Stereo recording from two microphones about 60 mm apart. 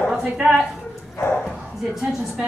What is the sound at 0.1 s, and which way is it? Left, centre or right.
Speech, centre.